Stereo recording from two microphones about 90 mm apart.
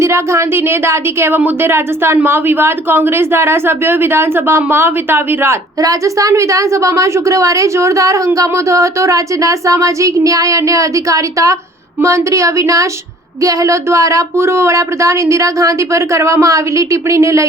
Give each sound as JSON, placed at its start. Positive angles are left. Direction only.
{"t": 0.0, "sound": "a woman's voice", "side_deg": -35}
{"t": 5.8, "sound": "a woman's voice", "side_deg": -40}